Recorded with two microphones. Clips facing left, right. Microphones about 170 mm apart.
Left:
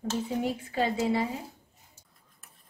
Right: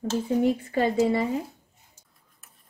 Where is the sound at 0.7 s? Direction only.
55° right (ahead or behind).